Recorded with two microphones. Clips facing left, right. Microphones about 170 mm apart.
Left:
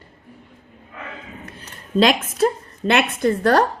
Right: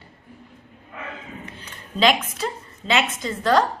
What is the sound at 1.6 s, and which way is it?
A woman's voice, 45° left (ahead or behind).